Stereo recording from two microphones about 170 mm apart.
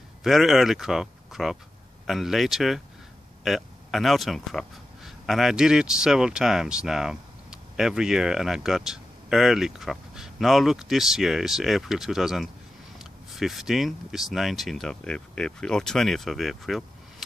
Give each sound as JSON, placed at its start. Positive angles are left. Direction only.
{"t": 0.2, "sound": "speech", "side_deg": 0}